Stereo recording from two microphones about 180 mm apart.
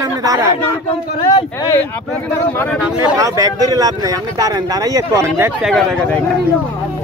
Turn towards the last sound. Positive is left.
turn(degrees=5)  # may be behind; listen again after turning